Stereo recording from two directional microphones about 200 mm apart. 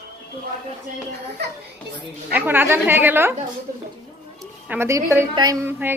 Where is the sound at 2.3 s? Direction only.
10° right (ahead or behind).